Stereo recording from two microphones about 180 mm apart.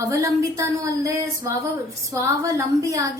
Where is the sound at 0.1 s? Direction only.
20° right (ahead or behind).